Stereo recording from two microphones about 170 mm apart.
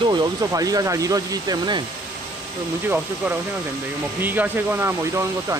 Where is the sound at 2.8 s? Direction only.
10° right (ahead or behind).